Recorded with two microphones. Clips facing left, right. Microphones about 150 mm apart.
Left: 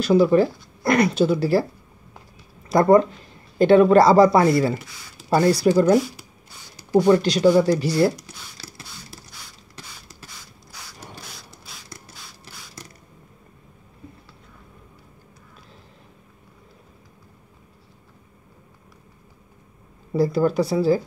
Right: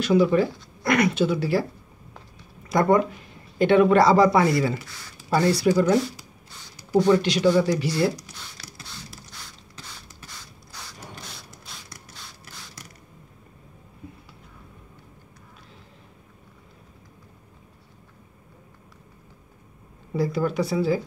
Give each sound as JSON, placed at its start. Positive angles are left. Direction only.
{"t": 0.0, "sound": "speech", "side_deg": 35}
{"t": 2.7, "sound": "speech", "side_deg": 35}
{"t": 6.9, "sound": "speech", "side_deg": 15}
{"t": 7.2, "sound": "speech", "side_deg": 40}
{"t": 10.7, "sound": "a sound", "side_deg": 5}
{"t": 20.2, "sound": "speech", "side_deg": 35}